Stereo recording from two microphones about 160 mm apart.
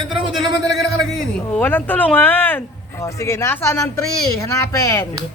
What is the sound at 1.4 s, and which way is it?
Speech, 10° left (ahead or behind).